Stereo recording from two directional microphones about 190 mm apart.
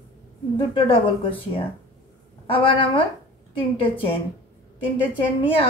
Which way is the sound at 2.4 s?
25° left (ahead or behind).